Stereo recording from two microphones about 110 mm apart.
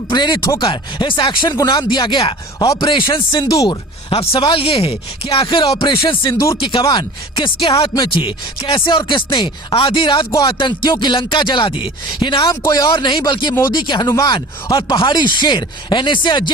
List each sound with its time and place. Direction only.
0.1 s speech: 45° left (ahead or behind)
3.5 s speech: 30° left (ahead or behind)
4.1 s speech: 55° left (ahead or behind)
12.6 s speech: 30° left (ahead or behind)